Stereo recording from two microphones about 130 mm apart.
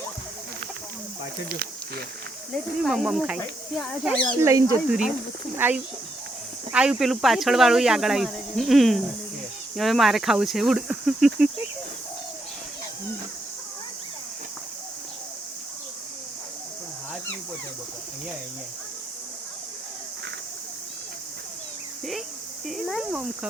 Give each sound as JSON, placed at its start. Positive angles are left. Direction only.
{"t": 2.5, "sound": "speech", "side_deg": 0}
{"t": 4.1, "sound": "speech", "side_deg": 10}
{"t": 4.4, "sound": "speech", "side_deg": -20}
{"t": 4.9, "sound": "speech", "side_deg": -5}
{"t": 22.6, "sound": "speech", "side_deg": 0}